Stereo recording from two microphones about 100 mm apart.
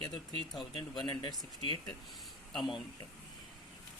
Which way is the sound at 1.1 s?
55° left (ahead or behind).